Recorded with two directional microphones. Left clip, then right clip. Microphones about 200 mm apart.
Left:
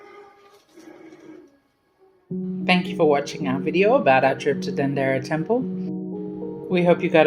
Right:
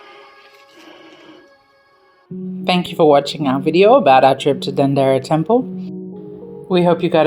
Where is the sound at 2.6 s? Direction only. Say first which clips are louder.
Right 6 dB; 45° right (ahead or behind).